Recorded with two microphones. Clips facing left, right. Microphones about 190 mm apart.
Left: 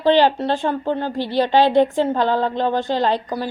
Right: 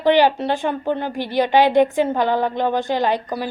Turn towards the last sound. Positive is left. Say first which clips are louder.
# even
turn(degrees=-15)  # may be behind; listen again after turning